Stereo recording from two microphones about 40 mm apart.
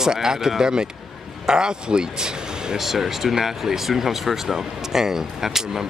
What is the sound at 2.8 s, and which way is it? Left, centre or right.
Speech, centre.